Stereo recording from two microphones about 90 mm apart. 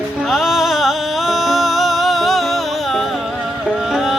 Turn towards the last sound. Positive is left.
turn(degrees=-5)  # may be behind; listen again after turning